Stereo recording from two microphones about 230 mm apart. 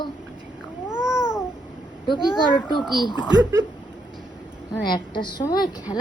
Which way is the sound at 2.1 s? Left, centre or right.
Centre.